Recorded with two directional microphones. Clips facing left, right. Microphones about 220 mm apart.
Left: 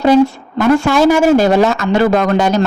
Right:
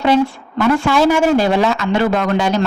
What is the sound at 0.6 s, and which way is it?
Speech, 45° left (ahead or behind).